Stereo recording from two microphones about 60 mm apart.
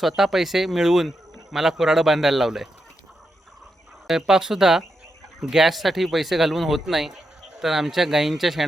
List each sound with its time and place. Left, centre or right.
0.0 s speech: centre
4.0 s speech: centre